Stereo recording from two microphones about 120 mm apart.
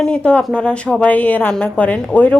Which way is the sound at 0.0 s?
10° left (ahead or behind).